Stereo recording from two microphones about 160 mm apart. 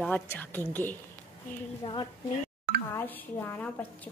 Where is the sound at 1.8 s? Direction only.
30° left (ahead or behind).